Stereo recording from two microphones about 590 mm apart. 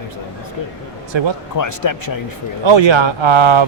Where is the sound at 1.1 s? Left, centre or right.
Right.